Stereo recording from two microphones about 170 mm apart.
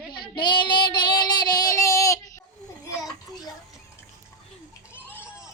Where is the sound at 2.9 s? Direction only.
20° left (ahead or behind).